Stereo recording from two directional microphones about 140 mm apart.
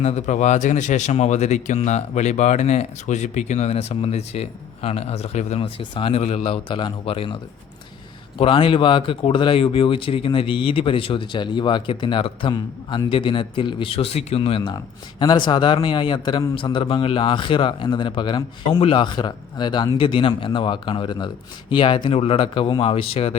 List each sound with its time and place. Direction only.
0.0 s speech: 55° left (ahead or behind)
5.8 s speech: 35° left (ahead or behind)